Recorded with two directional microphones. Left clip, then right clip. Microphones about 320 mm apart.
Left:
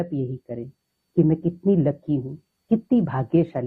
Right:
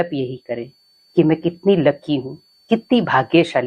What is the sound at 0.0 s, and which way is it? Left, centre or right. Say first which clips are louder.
Speech: right 7 dB; centre.